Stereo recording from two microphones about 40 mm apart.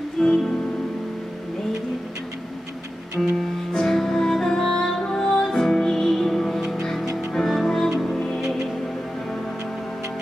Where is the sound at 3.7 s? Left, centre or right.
Centre.